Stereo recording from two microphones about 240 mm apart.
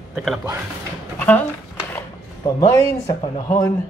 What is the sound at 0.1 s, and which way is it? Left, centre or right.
Speech, centre.